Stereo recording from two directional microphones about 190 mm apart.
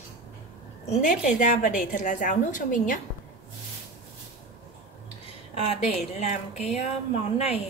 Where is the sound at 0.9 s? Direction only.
40° left (ahead or behind).